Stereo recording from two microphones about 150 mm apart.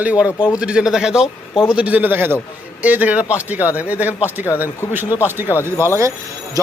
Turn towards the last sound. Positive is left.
turn(degrees=-25)  # may be behind; listen again after turning